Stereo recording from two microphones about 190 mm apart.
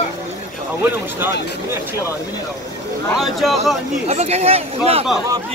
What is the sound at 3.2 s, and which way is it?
Speech, centre (ahead or behind).